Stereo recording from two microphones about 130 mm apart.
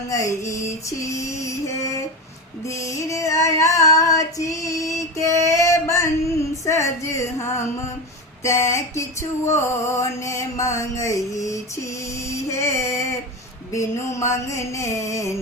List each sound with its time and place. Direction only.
0.1 s mantra: 25° left (ahead or behind)
2.6 s female singing: 20° left (ahead or behind)
6.7 s mantra: 20° left (ahead or behind)
12.3 s female singing: 20° left (ahead or behind)
13.7 s mantra: 20° left (ahead or behind)